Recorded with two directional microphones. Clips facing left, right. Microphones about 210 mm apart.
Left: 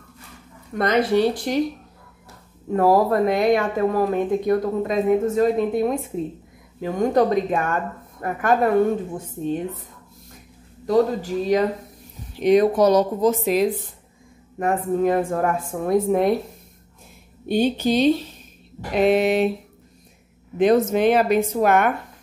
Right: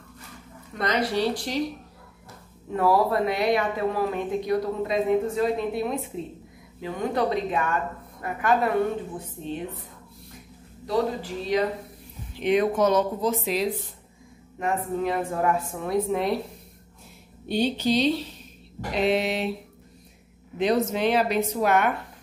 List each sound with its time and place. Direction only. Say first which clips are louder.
0.7 s a woman's voice: left 6 dB; 55° left (ahead or behind)
2.7 s a woman's voice: left 5 dB; 45° left (ahead or behind)
10.9 s a woman's voice: left 7 dB; 45° left (ahead or behind)
17.5 s a woman's voice: left 4 dB; 50° left (ahead or behind)
20.5 s a woman's voice: left 6 dB; 50° left (ahead or behind)